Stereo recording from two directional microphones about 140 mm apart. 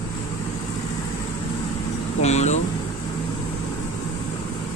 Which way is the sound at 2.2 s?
55° left (ahead or behind).